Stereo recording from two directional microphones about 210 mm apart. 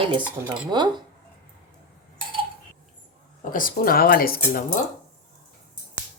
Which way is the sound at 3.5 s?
40° left (ahead or behind).